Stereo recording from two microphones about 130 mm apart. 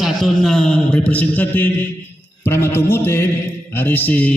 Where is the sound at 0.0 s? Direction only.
Centre (ahead or behind).